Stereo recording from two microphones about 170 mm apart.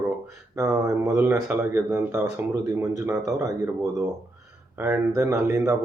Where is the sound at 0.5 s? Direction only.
20° right (ahead or behind).